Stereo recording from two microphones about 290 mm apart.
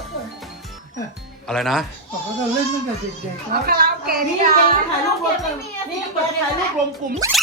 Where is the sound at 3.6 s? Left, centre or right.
Right.